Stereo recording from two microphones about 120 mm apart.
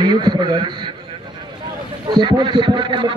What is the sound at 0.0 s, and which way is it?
Speech, 40° right (ahead or behind).